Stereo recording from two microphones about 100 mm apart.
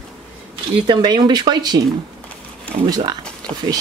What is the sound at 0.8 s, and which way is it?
Speech, 50° right (ahead or behind).